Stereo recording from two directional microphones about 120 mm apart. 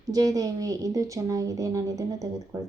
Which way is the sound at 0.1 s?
30° right (ahead or behind).